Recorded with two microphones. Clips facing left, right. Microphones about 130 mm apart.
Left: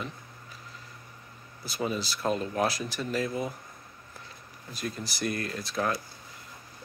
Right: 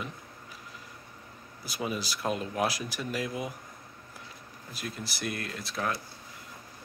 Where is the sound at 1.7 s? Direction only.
10° right (ahead or behind).